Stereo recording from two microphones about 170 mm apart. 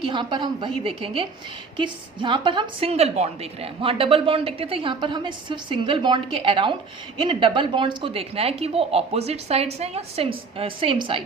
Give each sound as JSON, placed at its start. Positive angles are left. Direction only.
{"t": 0.0, "sound": "a woman's voice", "side_deg": -30}